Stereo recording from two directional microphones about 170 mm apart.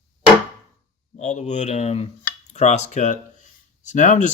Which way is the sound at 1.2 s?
45° left (ahead or behind).